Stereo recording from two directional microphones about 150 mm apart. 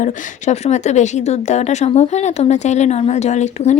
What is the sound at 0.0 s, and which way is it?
Speech, 50° left (ahead or behind).